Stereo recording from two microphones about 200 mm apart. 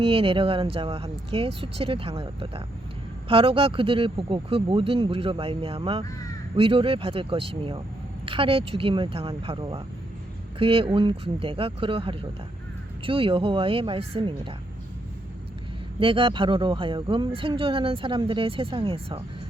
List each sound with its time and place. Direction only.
0.0 s speech: 25° right (ahead or behind)
16.0 s speech: 25° right (ahead or behind)